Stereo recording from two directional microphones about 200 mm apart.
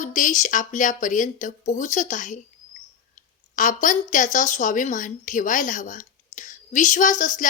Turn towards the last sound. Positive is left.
turn(degrees=40)  # may be behind; listen again after turning